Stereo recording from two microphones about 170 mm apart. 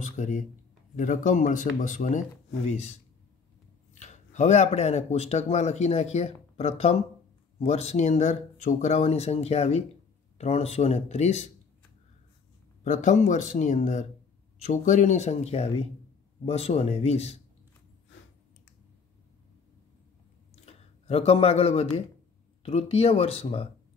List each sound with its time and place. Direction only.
0.0 s speech: 45° left (ahead or behind)
12.8 s speech: 45° left (ahead or behind)
20.6 s speech: 35° left (ahead or behind)